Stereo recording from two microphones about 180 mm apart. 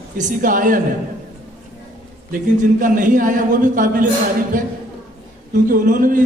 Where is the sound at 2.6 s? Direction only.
45° right (ahead or behind).